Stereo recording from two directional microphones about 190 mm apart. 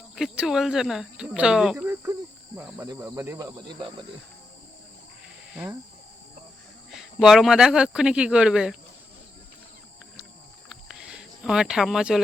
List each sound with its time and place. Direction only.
0.2 s speech: centre (ahead or behind)
6.9 s speech: centre (ahead or behind)
10.7 s a sound: 5° right (ahead or behind)